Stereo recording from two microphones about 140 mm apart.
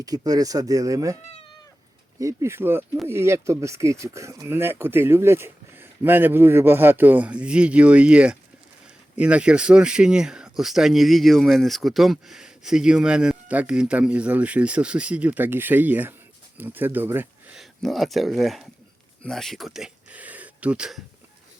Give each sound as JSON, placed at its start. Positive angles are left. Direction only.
{"t": 0.0, "sound": "speech", "side_deg": -25}
{"t": 1.2, "sound": "speech", "side_deg": 50}
{"t": 2.1, "sound": "speech", "side_deg": -20}
{"t": 17.6, "sound": "speech", "side_deg": 0}